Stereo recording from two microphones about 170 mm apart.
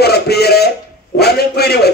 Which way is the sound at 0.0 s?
70° left (ahead or behind).